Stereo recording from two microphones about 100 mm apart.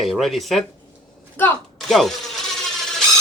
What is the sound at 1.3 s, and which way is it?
Speech, 20° left (ahead or behind).